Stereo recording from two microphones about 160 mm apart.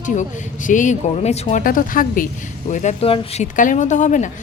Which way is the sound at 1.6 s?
60° left (ahead or behind).